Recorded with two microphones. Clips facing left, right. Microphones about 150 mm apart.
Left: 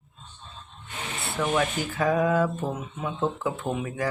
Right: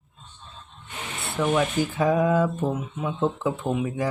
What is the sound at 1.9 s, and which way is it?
Speech, 20° right (ahead or behind).